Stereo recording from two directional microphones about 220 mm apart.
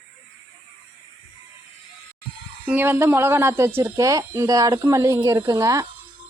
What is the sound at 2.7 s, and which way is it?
Speech, 10° right (ahead or behind).